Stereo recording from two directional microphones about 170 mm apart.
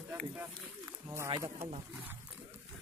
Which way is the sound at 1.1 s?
20° right (ahead or behind).